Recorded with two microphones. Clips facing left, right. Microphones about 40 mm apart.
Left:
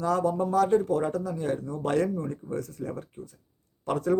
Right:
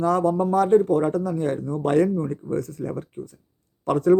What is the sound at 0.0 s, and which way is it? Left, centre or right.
Speech, right.